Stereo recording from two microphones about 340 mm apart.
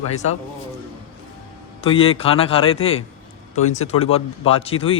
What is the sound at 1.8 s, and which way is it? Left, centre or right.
A man's voice, centre.